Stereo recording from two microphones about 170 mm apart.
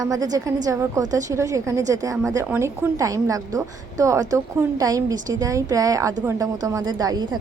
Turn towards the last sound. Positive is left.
turn(degrees=-25)  # may be behind; listen again after turning